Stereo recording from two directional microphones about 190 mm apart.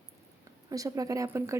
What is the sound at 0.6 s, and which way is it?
Speech, 20° right (ahead or behind).